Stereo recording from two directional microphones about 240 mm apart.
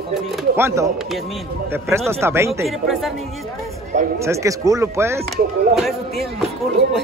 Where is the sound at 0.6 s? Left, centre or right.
Centre.